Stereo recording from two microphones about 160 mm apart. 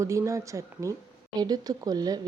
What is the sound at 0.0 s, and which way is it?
A woman's voice, 20° right (ahead or behind).